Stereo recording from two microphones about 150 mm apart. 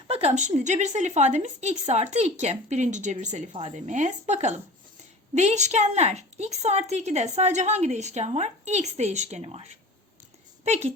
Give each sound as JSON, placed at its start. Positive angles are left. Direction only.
{"t": 0.1, "sound": "a woman's voice", "side_deg": -45}